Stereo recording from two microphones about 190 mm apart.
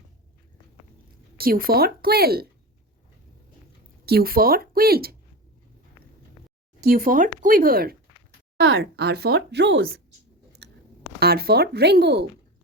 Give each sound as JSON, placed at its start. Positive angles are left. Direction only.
{"t": 1.4, "sound": "speech", "side_deg": -50}
{"t": 4.0, "sound": "speech", "side_deg": -55}
{"t": 6.8, "sound": "speech", "side_deg": -50}
{"t": 8.6, "sound": "speech", "side_deg": -80}
{"t": 10.6, "sound": "chewing", "side_deg": -60}
{"t": 11.2, "sound": "speech", "side_deg": -55}